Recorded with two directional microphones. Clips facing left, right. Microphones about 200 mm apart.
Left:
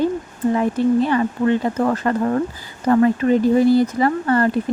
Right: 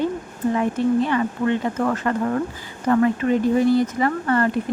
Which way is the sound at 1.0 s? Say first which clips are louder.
Left 3 dB; 35° left (ahead or behind).